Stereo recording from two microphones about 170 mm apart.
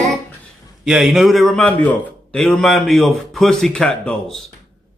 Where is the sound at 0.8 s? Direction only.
Centre (ahead or behind).